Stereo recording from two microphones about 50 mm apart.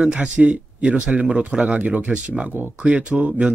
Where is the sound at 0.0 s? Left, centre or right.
Right.